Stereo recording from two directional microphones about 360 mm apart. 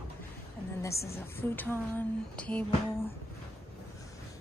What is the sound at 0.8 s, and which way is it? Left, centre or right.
A woman's voice, centre.